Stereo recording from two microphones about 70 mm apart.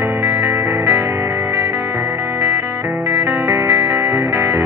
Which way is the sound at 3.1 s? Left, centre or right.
Right.